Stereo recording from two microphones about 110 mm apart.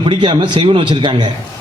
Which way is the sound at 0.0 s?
50° right (ahead or behind).